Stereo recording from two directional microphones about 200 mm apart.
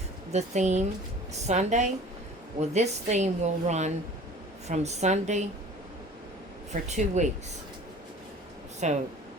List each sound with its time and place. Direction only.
0.3 s a woman's voice: 35° right (ahead or behind)
6.8 s a woman's voice: 35° right (ahead or behind)
8.8 s a woman's voice: 35° right (ahead or behind)